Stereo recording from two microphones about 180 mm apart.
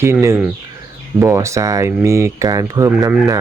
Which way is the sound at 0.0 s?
15° right (ahead or behind).